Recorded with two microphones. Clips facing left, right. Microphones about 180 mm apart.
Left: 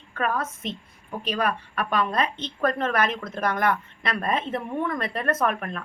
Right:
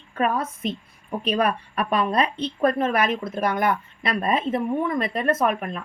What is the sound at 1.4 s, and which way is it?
Speech, 30° right (ahead or behind).